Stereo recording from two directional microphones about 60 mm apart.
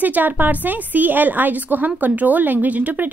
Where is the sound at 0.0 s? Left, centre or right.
Right.